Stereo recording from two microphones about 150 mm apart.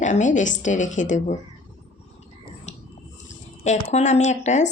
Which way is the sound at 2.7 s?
50° left (ahead or behind).